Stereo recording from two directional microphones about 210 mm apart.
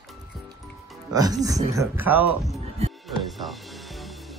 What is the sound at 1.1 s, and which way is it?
A man's voice, 15° right (ahead or behind).